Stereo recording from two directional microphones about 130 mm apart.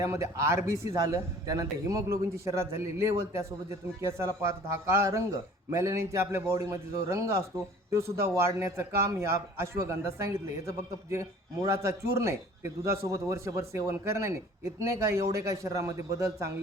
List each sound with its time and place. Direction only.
0.0 s a man's voice: 25° right (ahead or behind)
8.4 s a man's voice: 20° right (ahead or behind)